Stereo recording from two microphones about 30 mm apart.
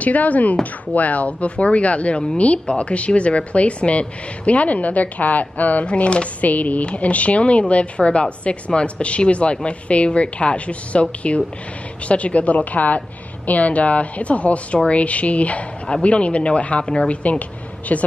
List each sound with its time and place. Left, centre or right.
0.0 s speech: left
5.9 s speech: left
6.4 s a woman's voice: left